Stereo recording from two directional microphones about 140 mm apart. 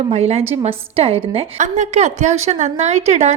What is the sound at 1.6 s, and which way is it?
A woman's voice, 60° right (ahead or behind).